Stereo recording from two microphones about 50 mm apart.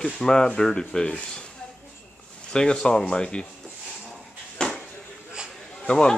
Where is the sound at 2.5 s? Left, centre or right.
Centre.